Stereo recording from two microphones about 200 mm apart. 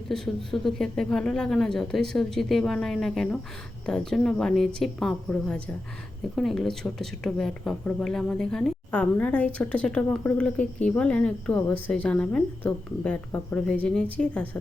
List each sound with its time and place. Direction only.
0.1 s speech: centre (ahead or behind)